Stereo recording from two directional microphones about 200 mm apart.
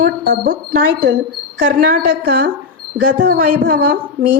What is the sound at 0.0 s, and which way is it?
A woman's voice, 45° right (ahead or behind).